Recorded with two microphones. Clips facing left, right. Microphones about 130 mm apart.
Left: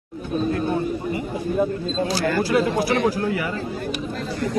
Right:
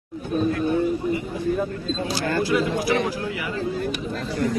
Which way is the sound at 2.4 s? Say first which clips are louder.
Left 2 dB; 45° left (ahead or behind).